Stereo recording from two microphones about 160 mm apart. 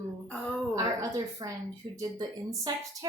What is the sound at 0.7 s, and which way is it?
A woman's voice, 20° right (ahead or behind).